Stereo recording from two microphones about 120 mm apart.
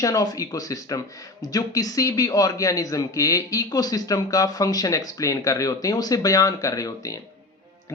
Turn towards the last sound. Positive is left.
turn(degrees=30)  # may be behind; listen again after turning